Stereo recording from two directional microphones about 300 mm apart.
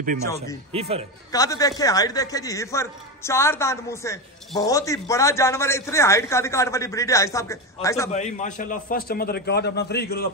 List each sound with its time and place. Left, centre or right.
0.2 s a man's voice: centre
0.7 s a man's voice: centre
1.3 s a man's voice: centre
8.1 s a man's voice: left